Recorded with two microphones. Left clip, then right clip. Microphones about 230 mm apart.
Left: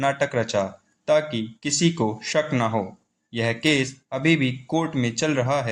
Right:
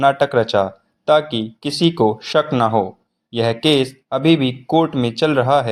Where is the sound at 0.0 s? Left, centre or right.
Right.